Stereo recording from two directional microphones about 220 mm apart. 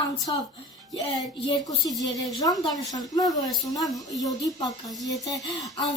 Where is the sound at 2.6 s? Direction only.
15° left (ahead or behind).